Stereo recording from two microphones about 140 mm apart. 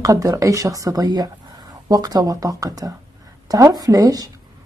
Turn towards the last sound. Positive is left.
turn(degrees=-25)  # may be behind; listen again after turning